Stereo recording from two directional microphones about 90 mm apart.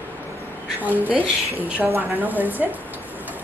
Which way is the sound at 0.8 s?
20° right (ahead or behind).